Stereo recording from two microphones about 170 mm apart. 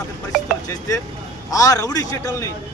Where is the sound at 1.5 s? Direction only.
20° left (ahead or behind).